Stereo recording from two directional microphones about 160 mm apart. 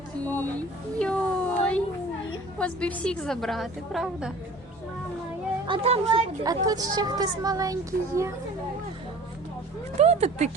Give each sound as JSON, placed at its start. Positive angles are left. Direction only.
{"t": 0.9, "sound": "a sound", "side_deg": 5}
{"t": 2.6, "sound": "a woman's voice", "side_deg": 5}
{"t": 5.6, "sound": "speech", "side_deg": -35}
{"t": 6.4, "sound": "a child's voice", "side_deg": -25}
{"t": 10.0, "sound": "speech", "side_deg": -40}